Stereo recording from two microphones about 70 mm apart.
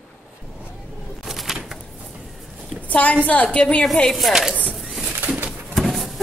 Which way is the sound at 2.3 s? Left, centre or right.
Centre.